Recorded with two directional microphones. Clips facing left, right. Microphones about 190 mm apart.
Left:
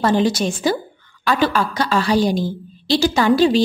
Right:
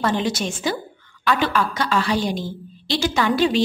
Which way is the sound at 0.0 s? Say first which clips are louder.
Left 5 dB; 35° left (ahead or behind).